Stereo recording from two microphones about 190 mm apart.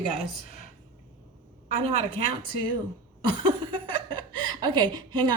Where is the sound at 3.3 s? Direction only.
25° right (ahead or behind).